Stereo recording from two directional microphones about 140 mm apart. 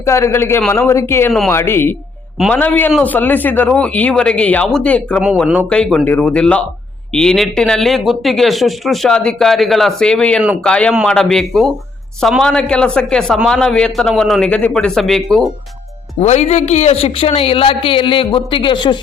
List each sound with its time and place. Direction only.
0.0 s a man's voice: 20° left (ahead or behind); by 15.4 s centre (ahead or behind)
16.2 s speech: 50° left (ahead or behind); by 18.9 s 35° left (ahead or behind)